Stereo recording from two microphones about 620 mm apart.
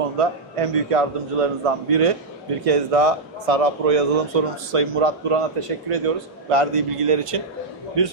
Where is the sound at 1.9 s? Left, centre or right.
Right.